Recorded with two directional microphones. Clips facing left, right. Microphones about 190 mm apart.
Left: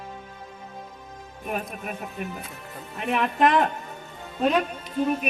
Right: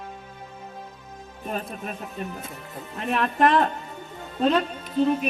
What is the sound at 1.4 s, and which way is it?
Music, 10° left (ahead or behind).